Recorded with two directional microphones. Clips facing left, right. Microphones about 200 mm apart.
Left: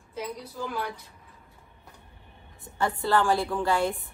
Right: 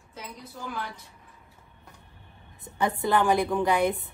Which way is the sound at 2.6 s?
20° right (ahead or behind).